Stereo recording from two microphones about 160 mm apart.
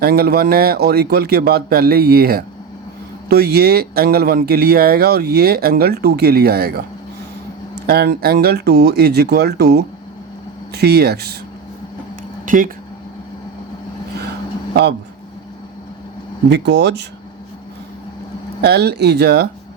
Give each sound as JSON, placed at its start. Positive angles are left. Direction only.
{"t": 0.0, "sound": "speech", "side_deg": -75}
{"t": 7.9, "sound": "speech", "side_deg": -75}
{"t": 12.5, "sound": "speech", "side_deg": -60}
{"t": 14.7, "sound": "speech", "side_deg": -90}
{"t": 16.5, "sound": "speech", "side_deg": -90}
{"t": 18.6, "sound": "speech", "side_deg": -90}